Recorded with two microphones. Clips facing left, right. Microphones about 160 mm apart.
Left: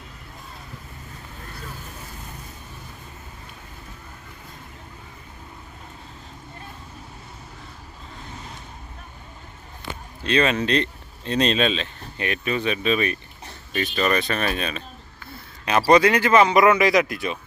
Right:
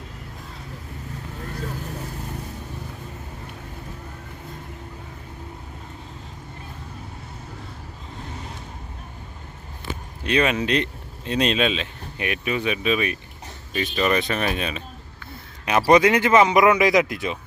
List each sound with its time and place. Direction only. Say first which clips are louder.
10.2 s speech: even; 15° right (ahead or behind)